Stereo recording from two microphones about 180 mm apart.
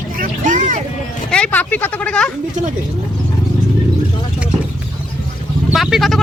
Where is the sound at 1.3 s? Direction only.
5° left (ahead or behind).